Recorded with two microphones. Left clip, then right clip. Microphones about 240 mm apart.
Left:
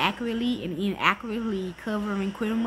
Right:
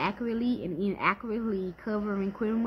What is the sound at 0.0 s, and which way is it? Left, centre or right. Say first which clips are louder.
Speech: left 4 dB; centre.